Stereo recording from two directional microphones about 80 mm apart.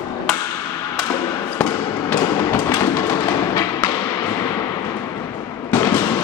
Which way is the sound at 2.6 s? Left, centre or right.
Left.